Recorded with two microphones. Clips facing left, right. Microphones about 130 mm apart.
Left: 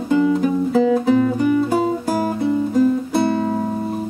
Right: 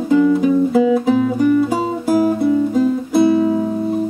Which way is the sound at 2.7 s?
5° right (ahead or behind).